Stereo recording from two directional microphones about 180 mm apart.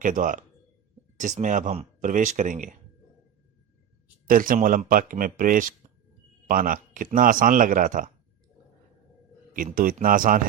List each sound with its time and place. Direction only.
0.0 s speech: 45° right (ahead or behind)
4.3 s speech: 50° right (ahead or behind)
9.5 s speech: 50° right (ahead or behind)